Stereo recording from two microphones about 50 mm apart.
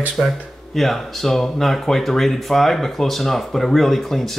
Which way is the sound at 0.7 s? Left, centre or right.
Centre.